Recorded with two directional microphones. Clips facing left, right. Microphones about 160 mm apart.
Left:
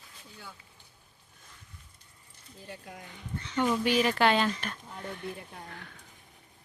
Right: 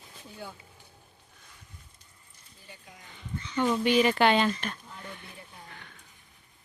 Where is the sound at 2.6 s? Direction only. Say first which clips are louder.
Left 7 dB; 80° left.